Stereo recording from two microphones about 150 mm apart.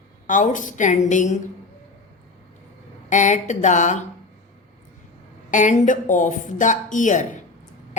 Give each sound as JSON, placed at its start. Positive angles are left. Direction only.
{"t": 0.3, "sound": "speech", "side_deg": 60}
{"t": 3.1, "sound": "speech", "side_deg": 55}
{"t": 5.5, "sound": "speech", "side_deg": 55}